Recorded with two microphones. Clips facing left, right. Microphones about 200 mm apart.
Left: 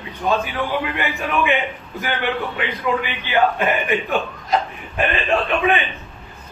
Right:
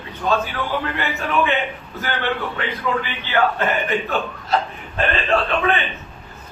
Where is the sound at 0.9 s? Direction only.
15° left (ahead or behind).